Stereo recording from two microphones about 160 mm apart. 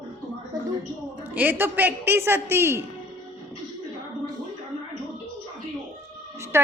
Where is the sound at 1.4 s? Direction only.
10° right (ahead or behind).